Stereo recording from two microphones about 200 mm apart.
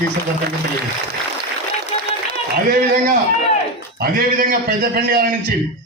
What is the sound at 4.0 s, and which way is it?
A man's voice, 45° right (ahead or behind).